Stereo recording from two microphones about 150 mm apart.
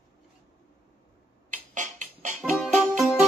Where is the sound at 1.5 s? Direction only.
55° right (ahead or behind).